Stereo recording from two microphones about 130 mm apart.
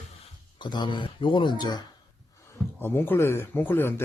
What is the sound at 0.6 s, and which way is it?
Speech, 35° left (ahead or behind).